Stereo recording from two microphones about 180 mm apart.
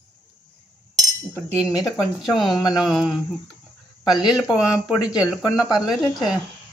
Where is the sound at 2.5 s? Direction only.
20° left (ahead or behind).